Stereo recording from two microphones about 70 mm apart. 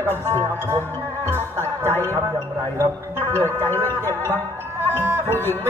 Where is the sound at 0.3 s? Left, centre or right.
Right.